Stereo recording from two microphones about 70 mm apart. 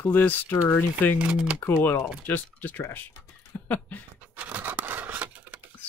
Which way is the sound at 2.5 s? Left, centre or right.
Left.